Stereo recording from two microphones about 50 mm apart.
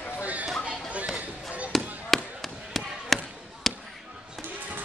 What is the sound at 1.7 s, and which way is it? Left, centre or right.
Chop, centre.